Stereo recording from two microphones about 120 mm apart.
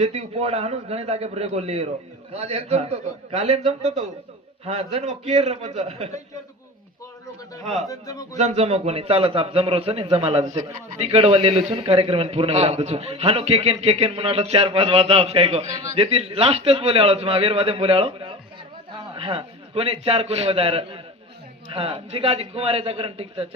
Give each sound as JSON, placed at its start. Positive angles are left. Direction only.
{"t": 0.0, "sound": "a man's voice", "side_deg": -60}
{"t": 7.9, "sound": "speech", "side_deg": 30}
{"t": 8.4, "sound": "a man's voice", "side_deg": -60}